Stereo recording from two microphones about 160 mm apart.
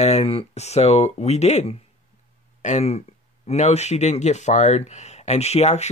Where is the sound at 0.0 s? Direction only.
40° left (ahead or behind).